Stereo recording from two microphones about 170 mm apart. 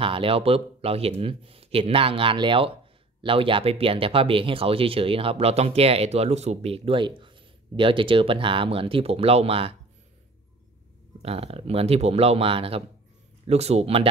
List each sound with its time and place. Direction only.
0.0 s speech: 30° right (ahead or behind)
11.2 s speech: 35° right (ahead or behind)